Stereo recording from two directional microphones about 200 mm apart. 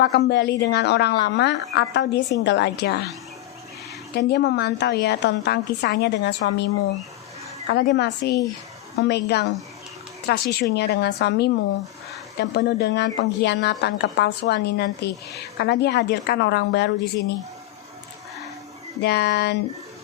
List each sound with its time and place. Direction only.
0.0 s a woman's voice: 55° left (ahead or behind)
4.1 s a woman's voice: 55° left (ahead or behind)
7.7 s a woman's voice: 55° left (ahead or behind)
19.0 s a sound: 55° left (ahead or behind)